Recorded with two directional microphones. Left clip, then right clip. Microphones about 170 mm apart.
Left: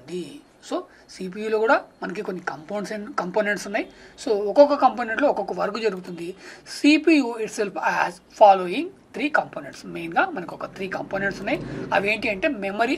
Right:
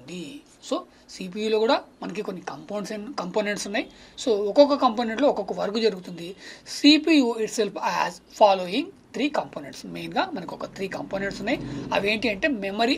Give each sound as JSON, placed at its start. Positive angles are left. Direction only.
{"t": 0.1, "sound": "speech", "side_deg": -30}